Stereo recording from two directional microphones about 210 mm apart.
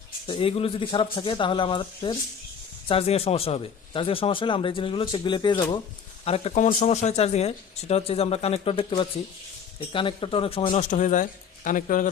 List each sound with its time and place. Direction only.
0.3 s speech: 25° left (ahead or behind)